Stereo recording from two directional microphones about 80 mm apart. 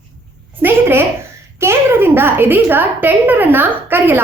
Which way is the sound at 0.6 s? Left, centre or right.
Right.